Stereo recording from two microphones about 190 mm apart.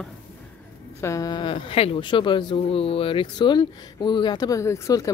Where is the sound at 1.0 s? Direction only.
15° left (ahead or behind).